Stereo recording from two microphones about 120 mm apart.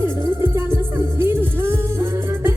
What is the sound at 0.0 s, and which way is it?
Music, 20° right (ahead or behind).